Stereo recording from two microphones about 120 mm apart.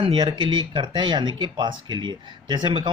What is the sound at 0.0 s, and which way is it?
Speech, 45° right (ahead or behind).